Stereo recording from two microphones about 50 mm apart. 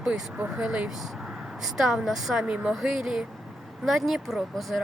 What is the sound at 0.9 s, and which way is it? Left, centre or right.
A woman's voice, centre.